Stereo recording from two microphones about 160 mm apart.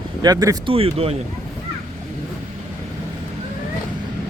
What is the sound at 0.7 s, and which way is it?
Speech, 40° right (ahead or behind).